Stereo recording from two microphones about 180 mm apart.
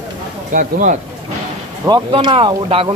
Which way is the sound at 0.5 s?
45° right (ahead or behind).